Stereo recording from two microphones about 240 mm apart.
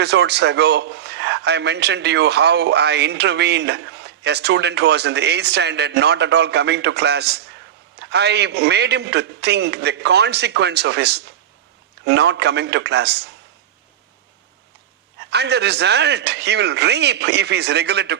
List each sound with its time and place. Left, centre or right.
0.0 s a man's voice: right
15.2 s a man's voice: right